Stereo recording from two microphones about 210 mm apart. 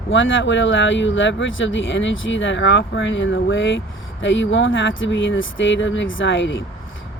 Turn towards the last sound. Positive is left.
turn(degrees=60)  # may be behind; listen again after turning